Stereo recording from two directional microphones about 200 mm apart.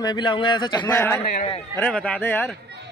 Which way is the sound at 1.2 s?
30° left (ahead or behind).